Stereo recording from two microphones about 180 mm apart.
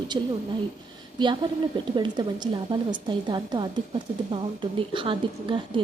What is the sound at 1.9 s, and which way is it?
Speech, 25° right (ahead or behind).